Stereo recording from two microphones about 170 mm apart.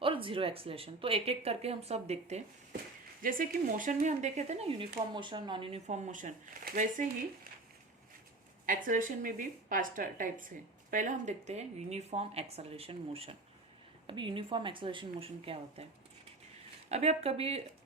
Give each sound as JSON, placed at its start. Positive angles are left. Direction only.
{"t": 0.0, "sound": "speech", "side_deg": -30}
{"t": 3.2, "sound": "speech", "side_deg": -55}
{"t": 5.1, "sound": "speech", "side_deg": -30}
{"t": 6.1, "sound": "speech", "side_deg": -50}
{"t": 8.6, "sound": "speech", "side_deg": -50}
{"t": 16.9, "sound": "speech", "side_deg": -40}